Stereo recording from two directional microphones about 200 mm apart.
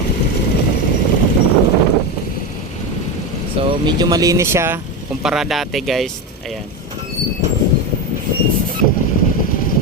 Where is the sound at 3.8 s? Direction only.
20° right (ahead or behind).